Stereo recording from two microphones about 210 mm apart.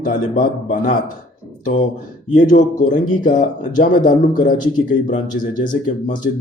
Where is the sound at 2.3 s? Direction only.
40° left (ahead or behind).